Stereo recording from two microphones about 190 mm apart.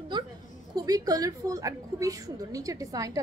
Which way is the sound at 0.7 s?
20° right (ahead or behind).